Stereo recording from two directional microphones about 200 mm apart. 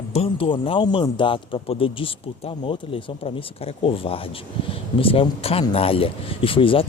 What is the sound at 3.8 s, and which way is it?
Speech, 25° left (ahead or behind).